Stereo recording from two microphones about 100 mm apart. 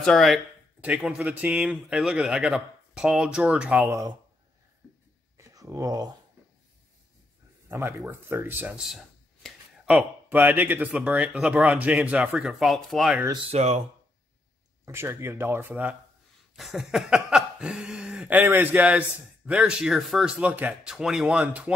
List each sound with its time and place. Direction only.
0.0 s speech: 5° left (ahead or behind)
0.7 s a man's voice: 10° right (ahead or behind)
5.4 s speech: 35° right (ahead or behind)
7.6 s speech: 25° right (ahead or behind)
9.8 s a man's voice: 15° right (ahead or behind)
13.5 s speech: 90° right
14.9 s speech: 25° right (ahead or behind)
16.5 s a sound: 5° right (ahead or behind)
18.3 s a man's voice: 20° right (ahead or behind)